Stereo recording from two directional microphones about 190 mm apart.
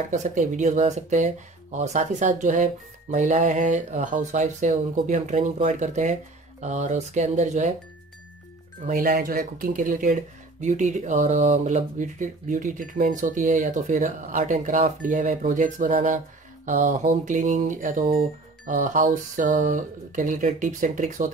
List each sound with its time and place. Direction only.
0.1 s speech: 40° right (ahead or behind)
8.8 s speech: 50° right (ahead or behind)